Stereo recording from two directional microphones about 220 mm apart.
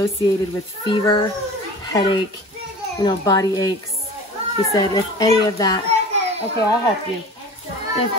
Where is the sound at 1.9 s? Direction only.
20° left (ahead or behind).